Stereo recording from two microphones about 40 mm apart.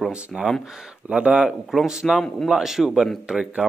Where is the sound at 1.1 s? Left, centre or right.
Right.